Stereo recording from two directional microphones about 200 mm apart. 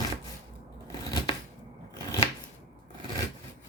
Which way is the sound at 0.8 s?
20° left (ahead or behind).